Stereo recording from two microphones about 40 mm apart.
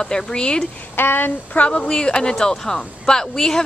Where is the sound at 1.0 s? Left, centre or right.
Left.